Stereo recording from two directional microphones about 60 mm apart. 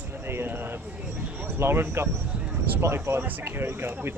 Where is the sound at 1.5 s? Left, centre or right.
Right.